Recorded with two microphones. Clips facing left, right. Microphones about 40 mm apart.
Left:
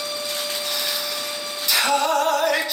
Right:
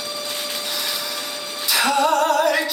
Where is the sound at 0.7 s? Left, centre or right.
Centre.